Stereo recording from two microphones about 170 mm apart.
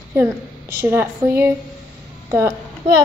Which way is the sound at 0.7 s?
15° right (ahead or behind).